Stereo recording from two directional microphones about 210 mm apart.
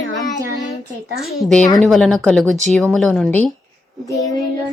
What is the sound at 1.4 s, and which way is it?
A woman's voice, 5° left (ahead or behind).